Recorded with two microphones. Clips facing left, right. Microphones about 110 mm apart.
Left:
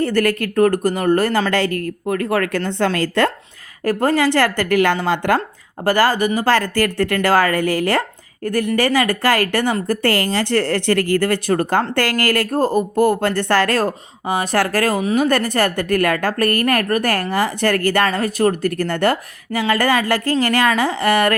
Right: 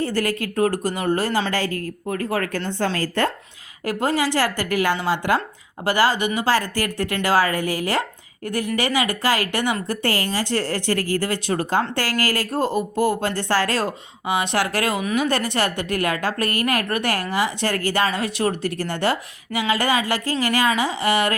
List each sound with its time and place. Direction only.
0.0 s speech: 55° left (ahead or behind)
3.8 s speech: 50° left (ahead or behind)
6.5 s speech: 55° left (ahead or behind)
12.5 s speech: 45° left (ahead or behind)